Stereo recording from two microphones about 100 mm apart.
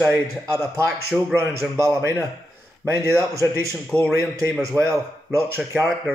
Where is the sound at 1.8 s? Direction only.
30° right (ahead or behind).